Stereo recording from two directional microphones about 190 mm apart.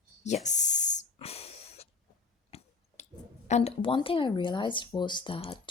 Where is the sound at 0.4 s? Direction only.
40° left (ahead or behind).